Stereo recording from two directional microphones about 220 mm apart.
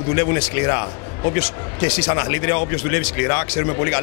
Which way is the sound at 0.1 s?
15° left (ahead or behind).